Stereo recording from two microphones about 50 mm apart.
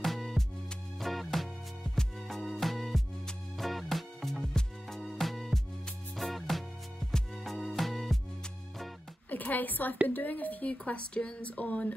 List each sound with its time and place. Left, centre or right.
0.0 s music: centre
7.0 s music: centre
7.3 s music: centre
9.3 s a woman's voice: left
10.9 s speech: left